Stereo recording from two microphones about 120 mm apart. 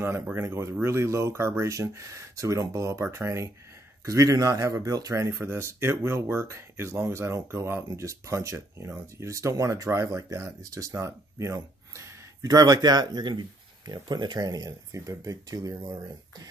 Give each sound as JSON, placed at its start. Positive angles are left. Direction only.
{"t": 0.0, "sound": "speech", "side_deg": -20}